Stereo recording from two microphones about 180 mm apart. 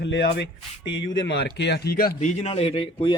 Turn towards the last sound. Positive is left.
turn(degrees=30)  # may be behind; listen again after turning